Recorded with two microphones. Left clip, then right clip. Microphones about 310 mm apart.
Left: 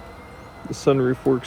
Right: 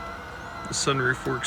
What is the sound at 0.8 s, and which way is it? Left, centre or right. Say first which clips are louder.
Speech: left 6 dB; centre.